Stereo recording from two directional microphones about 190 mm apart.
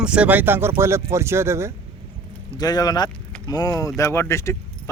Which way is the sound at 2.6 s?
20° left (ahead or behind).